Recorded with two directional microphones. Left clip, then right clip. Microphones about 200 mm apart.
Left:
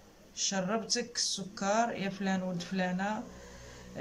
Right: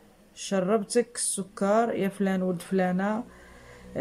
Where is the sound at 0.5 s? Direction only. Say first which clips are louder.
Right 7 dB; 35° right (ahead or behind).